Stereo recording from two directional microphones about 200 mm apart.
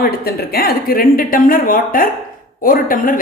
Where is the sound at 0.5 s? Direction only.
50° left (ahead or behind).